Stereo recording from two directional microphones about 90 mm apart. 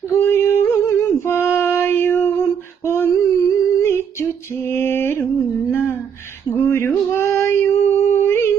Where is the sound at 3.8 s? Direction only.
30° left (ahead or behind).